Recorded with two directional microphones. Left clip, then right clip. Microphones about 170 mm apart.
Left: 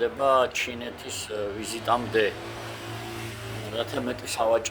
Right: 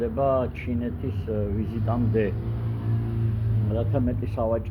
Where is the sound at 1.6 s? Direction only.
40° left (ahead or behind).